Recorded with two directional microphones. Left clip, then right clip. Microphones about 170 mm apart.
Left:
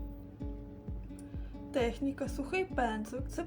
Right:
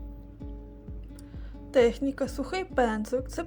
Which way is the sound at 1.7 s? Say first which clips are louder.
Right 10 dB; 45° right (ahead or behind).